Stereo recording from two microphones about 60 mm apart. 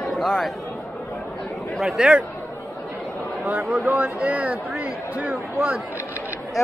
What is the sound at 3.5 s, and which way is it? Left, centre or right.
Speech, right.